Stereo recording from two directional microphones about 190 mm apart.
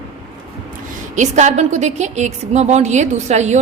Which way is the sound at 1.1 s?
40° right (ahead or behind).